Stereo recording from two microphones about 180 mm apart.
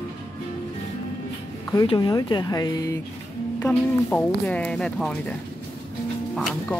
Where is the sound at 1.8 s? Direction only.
20° left (ahead or behind).